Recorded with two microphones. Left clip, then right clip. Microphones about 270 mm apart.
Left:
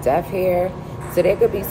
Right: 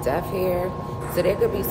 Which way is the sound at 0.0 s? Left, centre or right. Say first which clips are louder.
Left 5 dB; left.